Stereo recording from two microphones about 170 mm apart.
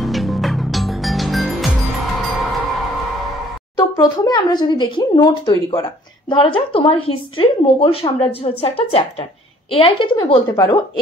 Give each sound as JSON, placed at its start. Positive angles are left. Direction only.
{"t": 0.0, "sound": "music", "side_deg": 0}
{"t": 3.9, "sound": "a woman's voice", "side_deg": 20}
{"t": 10.5, "sound": "a woman's voice", "side_deg": 20}